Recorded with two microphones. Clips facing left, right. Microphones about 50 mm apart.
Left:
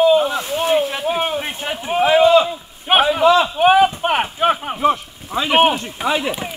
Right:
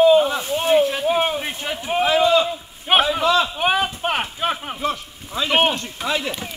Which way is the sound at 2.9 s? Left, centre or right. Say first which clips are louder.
Left 4 dB; centre.